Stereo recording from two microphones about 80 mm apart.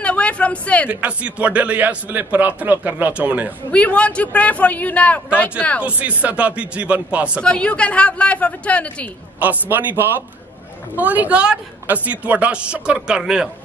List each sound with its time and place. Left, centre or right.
0.0 s a sound: centre
0.8 s a man's voice: centre
3.7 s a man's voice: centre
5.8 s speech: centre
7.4 s a man's voice: centre
9.4 s a man's voice: right